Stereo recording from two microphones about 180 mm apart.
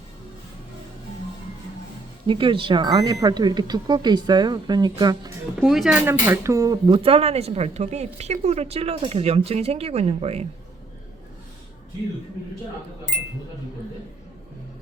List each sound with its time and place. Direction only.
2.2 s speech: 30° right (ahead or behind)
5.5 s speech: centre (ahead or behind)
6.2 s speech: 15° right (ahead or behind); by 10.4 s 35° right (ahead or behind)